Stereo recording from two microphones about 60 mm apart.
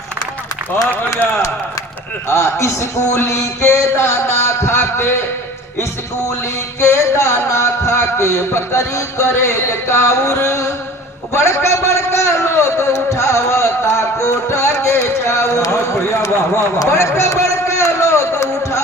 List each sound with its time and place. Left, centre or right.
2.2 s a man's voice: left
6.7 s a man's voice: left
17.8 s a sound: left